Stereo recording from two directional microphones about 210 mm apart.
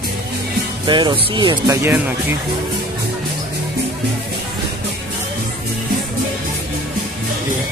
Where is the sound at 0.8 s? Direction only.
20° right (ahead or behind).